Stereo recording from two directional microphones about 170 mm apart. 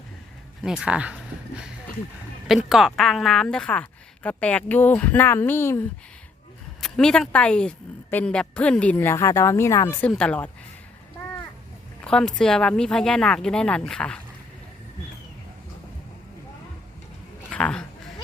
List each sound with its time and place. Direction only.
0.6 s a woman's voice: 5° right (ahead or behind); by 5.8 s 15° left (ahead or behind)
6.8 s a woman's voice: 5° left (ahead or behind)
10.1 s speech: 5° left (ahead or behind)
12.0 s speech: 5° left (ahead or behind)
17.5 s a sound: 5° left (ahead or behind)